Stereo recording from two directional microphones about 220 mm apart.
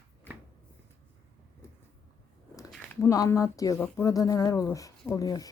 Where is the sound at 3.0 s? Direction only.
15° left (ahead or behind).